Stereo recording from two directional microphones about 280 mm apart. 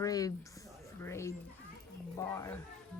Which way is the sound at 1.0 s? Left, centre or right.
Centre.